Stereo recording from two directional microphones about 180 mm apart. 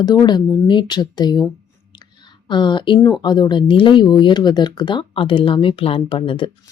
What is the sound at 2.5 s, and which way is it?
Speech, 25° left (ahead or behind).